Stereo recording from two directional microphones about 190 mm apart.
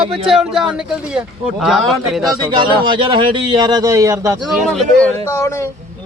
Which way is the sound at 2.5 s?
25° right (ahead or behind).